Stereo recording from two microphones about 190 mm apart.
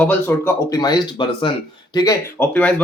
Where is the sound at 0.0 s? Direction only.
10° left (ahead or behind); by 1.5 s 25° left (ahead or behind).